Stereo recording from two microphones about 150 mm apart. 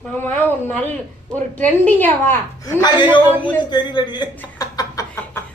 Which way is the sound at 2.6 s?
25° left (ahead or behind).